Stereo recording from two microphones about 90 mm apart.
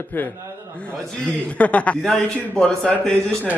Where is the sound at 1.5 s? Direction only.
15° left (ahead or behind).